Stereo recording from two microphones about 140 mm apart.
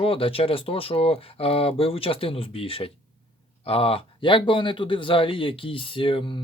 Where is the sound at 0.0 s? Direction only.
40° left (ahead or behind).